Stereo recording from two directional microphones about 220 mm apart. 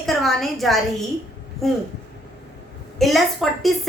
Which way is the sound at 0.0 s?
Centre (ahead or behind).